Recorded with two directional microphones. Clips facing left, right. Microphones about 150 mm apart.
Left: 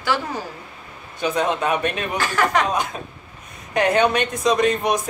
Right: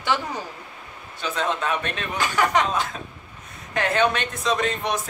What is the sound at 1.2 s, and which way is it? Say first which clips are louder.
Speech: left 5 dB; 15° left (ahead or behind).